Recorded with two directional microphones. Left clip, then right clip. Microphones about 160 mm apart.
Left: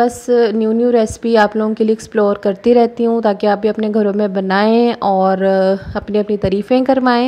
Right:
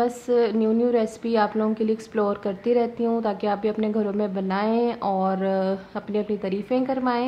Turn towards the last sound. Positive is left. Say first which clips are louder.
# left 11 dB
turn(degrees=45)  # may be behind; listen again after turning